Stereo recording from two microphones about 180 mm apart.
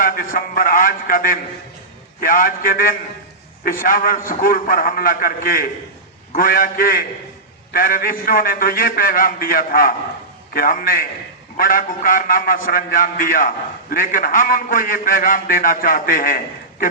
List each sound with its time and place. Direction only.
0.0 s a man's voice: 55° left (ahead or behind)